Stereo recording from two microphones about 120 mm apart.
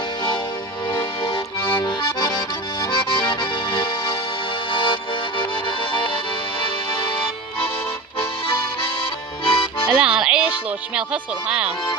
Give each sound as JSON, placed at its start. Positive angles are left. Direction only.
{"t": 1.2, "sound": "accordion", "side_deg": 40}
{"t": 5.4, "sound": "music", "side_deg": 45}
{"t": 9.4, "sound": "music", "side_deg": 50}
{"t": 9.9, "sound": "music", "side_deg": -10}
{"t": 10.7, "sound": "speech", "side_deg": -10}